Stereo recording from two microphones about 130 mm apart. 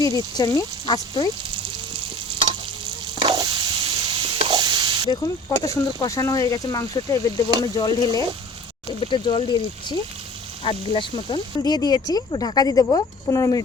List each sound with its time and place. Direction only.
0.0 s speech: 30° left (ahead or behind)
3.2 s stir: 30° right (ahead or behind)
5.1 s speech: 30° left (ahead or behind)
9.0 s speech: 40° left (ahead or behind)